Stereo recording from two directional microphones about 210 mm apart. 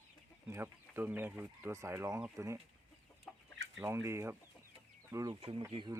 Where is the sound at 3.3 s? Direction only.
Centre (ahead or behind).